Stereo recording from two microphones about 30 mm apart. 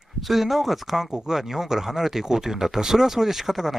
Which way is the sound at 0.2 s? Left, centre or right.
Centre.